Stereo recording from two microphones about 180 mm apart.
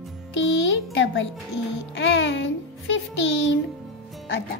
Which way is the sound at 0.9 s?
90° left.